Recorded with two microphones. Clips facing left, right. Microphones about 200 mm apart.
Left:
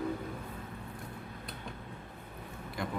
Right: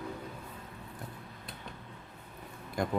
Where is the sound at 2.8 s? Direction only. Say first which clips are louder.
Right 5 dB; 45° right (ahead or behind).